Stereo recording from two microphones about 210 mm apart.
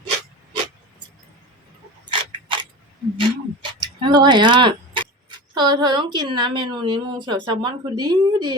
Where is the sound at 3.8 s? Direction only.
20° right (ahead or behind).